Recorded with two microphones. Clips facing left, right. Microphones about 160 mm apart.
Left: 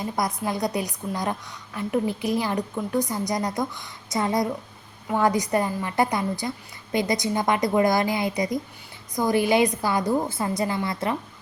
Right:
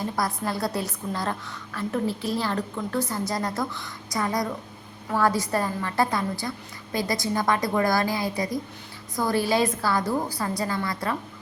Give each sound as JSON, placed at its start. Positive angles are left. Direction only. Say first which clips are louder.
{"t": 0.0, "sound": "a woman's voice", "louder": "left 1 dB", "side_deg": 15}